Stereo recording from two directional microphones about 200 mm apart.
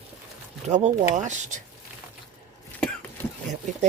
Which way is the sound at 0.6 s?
35° right (ahead or behind).